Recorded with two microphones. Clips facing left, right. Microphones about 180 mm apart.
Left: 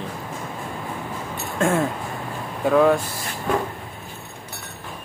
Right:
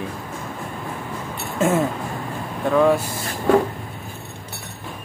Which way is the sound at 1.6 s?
5° right (ahead or behind).